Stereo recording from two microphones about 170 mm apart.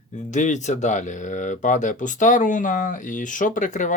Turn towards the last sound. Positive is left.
turn(degrees=45)  # may be behind; listen again after turning